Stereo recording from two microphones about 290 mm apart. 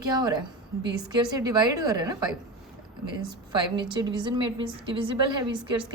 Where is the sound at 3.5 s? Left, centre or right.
Centre.